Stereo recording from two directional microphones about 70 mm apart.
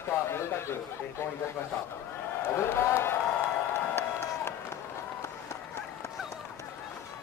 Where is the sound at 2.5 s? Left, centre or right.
Left.